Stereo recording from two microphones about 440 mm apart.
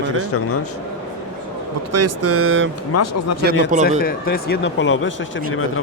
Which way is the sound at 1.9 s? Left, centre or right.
Right.